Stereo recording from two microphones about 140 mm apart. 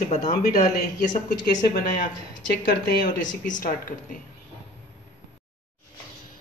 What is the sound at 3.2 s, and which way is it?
Speech, 70° left (ahead or behind).